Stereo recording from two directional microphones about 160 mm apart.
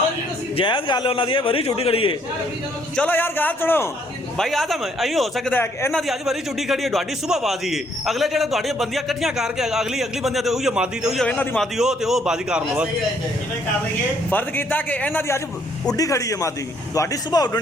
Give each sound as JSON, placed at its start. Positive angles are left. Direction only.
{"t": 0.5, "sound": "a man's voice", "side_deg": 30}
{"t": 2.9, "sound": "a man's voice", "side_deg": 10}
{"t": 4.4, "sound": "a man's voice", "side_deg": 0}
{"t": 14.3, "sound": "a man's voice", "side_deg": 10}